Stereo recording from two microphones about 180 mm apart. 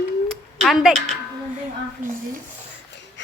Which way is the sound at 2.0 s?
10° right (ahead or behind).